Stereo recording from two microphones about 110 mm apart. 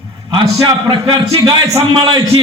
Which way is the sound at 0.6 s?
40° right (ahead or behind).